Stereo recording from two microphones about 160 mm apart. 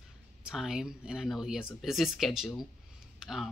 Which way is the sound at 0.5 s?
5° right (ahead or behind).